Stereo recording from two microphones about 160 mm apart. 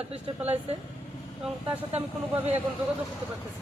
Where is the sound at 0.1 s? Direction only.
40° right (ahead or behind).